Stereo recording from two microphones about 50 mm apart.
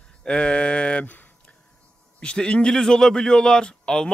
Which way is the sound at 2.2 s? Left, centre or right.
Centre.